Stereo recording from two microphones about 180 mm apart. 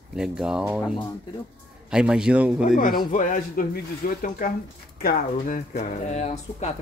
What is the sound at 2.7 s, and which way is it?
Speech, 50° left (ahead or behind).